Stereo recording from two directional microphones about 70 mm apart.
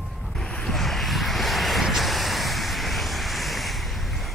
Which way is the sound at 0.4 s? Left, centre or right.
Centre.